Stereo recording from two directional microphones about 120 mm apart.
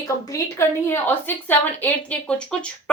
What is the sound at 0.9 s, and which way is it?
Speech, 15° left (ahead or behind).